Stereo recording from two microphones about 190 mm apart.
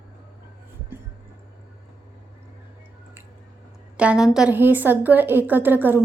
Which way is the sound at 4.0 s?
5° right (ahead or behind).